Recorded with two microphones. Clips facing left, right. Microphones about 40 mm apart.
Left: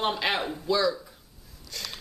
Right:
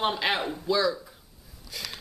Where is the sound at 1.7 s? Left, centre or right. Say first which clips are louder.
Even; centre.